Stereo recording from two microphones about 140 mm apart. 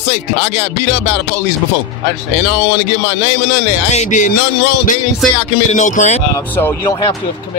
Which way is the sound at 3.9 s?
60° left (ahead or behind).